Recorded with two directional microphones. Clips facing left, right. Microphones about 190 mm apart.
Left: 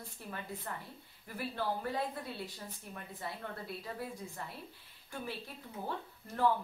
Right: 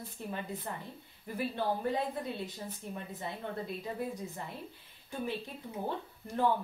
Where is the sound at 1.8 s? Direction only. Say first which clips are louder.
Right 4 dB; 20° right (ahead or behind).